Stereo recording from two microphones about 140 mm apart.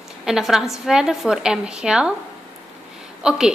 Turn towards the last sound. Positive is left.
turn(degrees=-5)  # may be behind; listen again after turning